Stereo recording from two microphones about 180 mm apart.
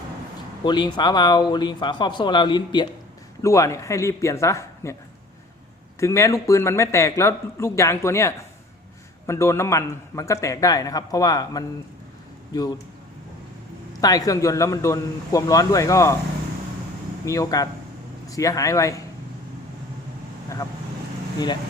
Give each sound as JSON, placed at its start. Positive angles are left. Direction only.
{"t": 0.6, "sound": "a man's voice", "side_deg": 25}
{"t": 6.0, "sound": "a man's voice", "side_deg": 15}
{"t": 14.0, "sound": "a man's voice", "side_deg": 20}
{"t": 17.2, "sound": "a man's voice", "side_deg": 15}